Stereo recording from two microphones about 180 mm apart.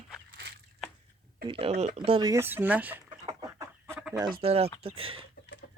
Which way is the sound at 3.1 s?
25° right (ahead or behind).